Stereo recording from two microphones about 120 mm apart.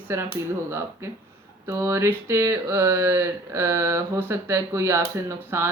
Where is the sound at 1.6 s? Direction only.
25° right (ahead or behind).